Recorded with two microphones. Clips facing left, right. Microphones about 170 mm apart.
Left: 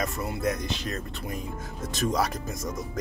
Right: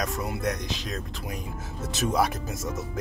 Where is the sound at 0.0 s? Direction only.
Centre (ahead or behind).